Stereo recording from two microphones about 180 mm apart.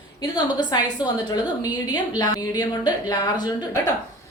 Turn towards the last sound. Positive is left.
turn(degrees=20)  # may be behind; listen again after turning